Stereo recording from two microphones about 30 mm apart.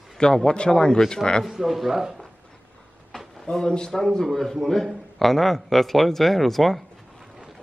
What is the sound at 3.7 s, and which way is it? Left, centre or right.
A man's voice, left.